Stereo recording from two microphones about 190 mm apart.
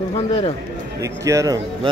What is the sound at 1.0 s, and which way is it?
Speech, 15° right (ahead or behind).